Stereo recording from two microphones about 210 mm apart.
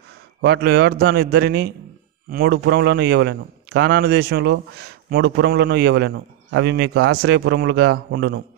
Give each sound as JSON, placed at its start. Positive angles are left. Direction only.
{"t": 0.4, "sound": "a man's voice", "side_deg": -50}